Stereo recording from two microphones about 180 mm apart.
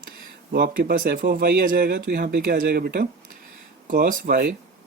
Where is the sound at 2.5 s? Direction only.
50° right (ahead or behind).